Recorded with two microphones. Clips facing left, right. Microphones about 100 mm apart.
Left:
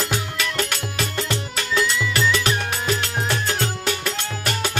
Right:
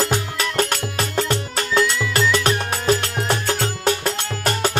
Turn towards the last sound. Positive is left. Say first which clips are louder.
# right 4 dB
turn(degrees=-40)  # may be behind; listen again after turning